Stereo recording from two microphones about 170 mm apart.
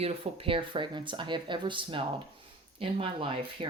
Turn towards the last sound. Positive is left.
turn(degrees=-30)  # may be behind; listen again after turning